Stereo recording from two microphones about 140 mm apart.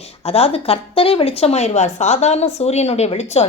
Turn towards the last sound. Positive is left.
turn(degrees=50)  # may be behind; listen again after turning